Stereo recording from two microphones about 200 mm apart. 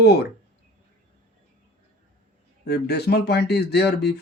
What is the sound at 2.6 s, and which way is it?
Speech, 55° left (ahead or behind).